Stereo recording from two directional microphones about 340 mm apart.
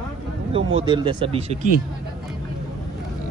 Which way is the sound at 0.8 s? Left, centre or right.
Centre.